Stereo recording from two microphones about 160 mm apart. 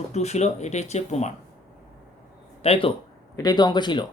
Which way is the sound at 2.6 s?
35° left (ahead or behind).